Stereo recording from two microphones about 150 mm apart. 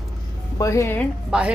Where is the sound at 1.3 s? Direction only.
5° right (ahead or behind).